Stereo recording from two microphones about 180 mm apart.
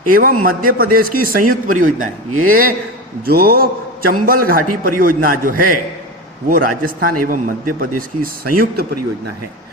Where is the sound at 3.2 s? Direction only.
55° right (ahead or behind).